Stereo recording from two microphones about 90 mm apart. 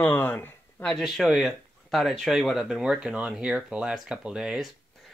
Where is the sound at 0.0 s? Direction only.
20° left (ahead or behind).